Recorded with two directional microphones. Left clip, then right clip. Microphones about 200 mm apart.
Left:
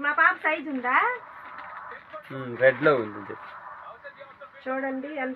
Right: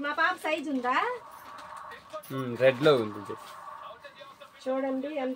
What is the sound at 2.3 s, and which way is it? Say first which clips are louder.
Speech: left 3 dB; 60° right (ahead or behind).